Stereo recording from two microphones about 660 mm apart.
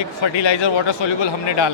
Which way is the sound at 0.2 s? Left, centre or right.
Left.